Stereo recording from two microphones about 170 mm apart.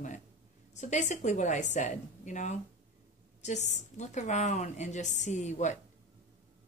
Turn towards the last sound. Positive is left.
turn(degrees=45)  # may be behind; listen again after turning